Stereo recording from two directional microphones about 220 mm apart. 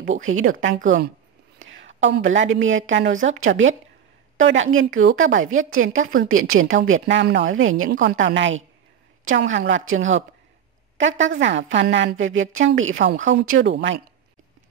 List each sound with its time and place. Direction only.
0.1 s a woman's voice: 65° right (ahead or behind)
1.7 s a woman's voice: 60° right (ahead or behind)
6.9 s a woman's voice: 55° right (ahead or behind)
7.9 s a woman's voice: 50° right (ahead or behind)
11.0 s a woman's voice: 60° right (ahead or behind)
13.1 s speech: 35° right (ahead or behind)
13.5 s a woman's voice: 60° right (ahead or behind)